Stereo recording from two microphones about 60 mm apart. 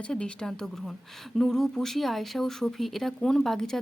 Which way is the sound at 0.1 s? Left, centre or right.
Centre.